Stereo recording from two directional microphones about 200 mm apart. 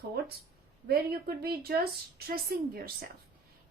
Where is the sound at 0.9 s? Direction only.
50° right (ahead or behind).